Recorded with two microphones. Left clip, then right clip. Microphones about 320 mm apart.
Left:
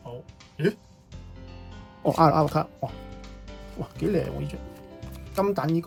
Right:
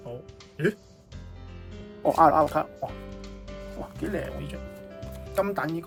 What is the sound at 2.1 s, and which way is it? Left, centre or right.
Speech, right.